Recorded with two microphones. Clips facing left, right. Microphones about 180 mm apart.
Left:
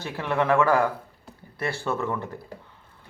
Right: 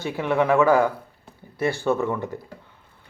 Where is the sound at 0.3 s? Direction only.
5° right (ahead or behind).